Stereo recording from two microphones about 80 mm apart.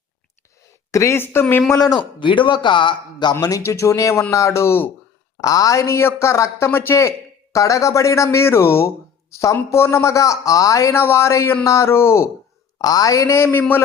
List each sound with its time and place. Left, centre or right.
0.9 s speech: left
1.7 s speech: left
2.0 s speech: left
3.4 s speech: left
5.4 s speech: left
12.8 s speech: left